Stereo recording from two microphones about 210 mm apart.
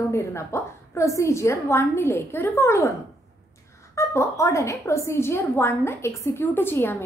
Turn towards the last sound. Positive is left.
turn(degrees=10)  # may be behind; listen again after turning